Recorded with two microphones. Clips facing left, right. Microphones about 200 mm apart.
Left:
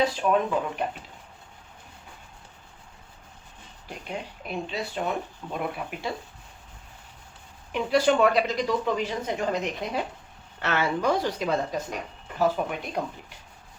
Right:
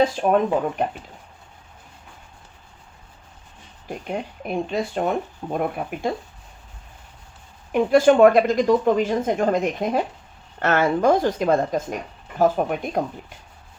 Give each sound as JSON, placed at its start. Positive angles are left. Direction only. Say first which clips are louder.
{"t": 0.0, "sound": "speech", "louder": "right 5 dB", "side_deg": -50}
{"t": 3.8, "sound": "speech", "louder": "right 7 dB", "side_deg": -50}
{"t": 7.7, "sound": "speech", "louder": "right 7 dB", "side_deg": -50}